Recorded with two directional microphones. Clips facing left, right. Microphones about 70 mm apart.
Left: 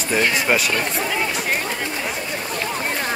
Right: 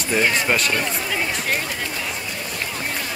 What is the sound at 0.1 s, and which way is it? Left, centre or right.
Speech, centre.